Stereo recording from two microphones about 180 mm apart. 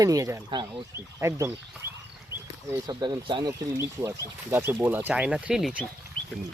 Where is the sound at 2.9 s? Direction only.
25° right (ahead or behind); by 5.9 s 5° right (ahead or behind).